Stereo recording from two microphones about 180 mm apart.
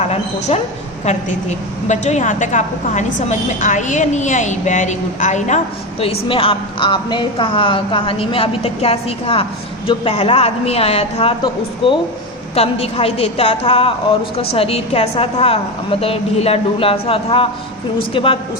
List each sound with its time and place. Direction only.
0.0 s a woman's voice: 35° left (ahead or behind)
1.9 s a woman's voice: 40° left (ahead or behind)
6.0 s a woman's voice: 30° left (ahead or behind)
12.5 s a woman's voice: 35° left (ahead or behind)